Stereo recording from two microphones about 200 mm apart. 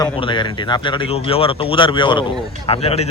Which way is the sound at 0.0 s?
25° left (ahead or behind).